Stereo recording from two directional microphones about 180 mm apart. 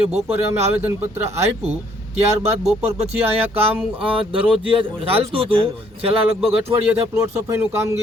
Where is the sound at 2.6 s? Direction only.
35° right (ahead or behind).